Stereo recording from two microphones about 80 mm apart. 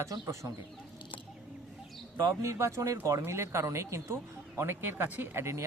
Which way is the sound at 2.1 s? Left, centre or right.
Right.